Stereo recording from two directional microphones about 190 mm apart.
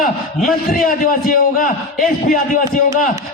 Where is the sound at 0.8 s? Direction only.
50° left (ahead or behind).